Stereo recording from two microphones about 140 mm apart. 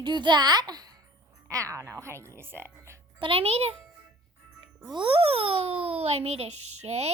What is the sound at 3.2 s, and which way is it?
Speech, 45° right (ahead or behind).